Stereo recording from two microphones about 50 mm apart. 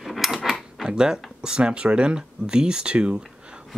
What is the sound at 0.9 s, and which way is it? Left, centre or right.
Speech, centre.